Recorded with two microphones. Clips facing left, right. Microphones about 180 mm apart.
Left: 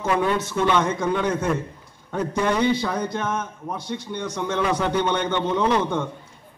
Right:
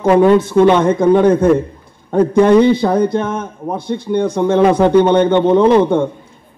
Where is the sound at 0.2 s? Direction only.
55° right (ahead or behind).